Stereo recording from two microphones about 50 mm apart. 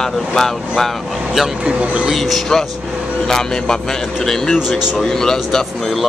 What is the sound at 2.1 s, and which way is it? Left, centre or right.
Speech, centre.